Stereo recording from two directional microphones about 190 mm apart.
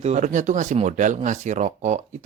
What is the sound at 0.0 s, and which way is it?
Speech, 35° right (ahead or behind).